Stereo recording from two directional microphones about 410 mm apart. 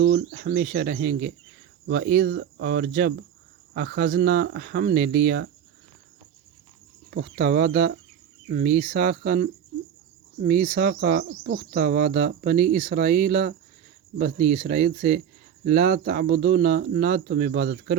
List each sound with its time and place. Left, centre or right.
0.0 s speech: right
7.1 s speech: right